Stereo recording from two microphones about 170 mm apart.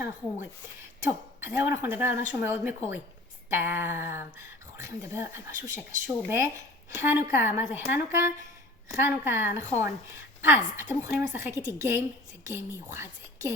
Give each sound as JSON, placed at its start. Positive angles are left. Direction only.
{"t": 1.0, "sound": "speech", "side_deg": -15}